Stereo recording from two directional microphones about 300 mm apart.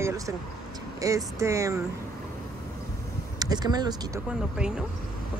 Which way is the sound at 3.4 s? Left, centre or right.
Centre.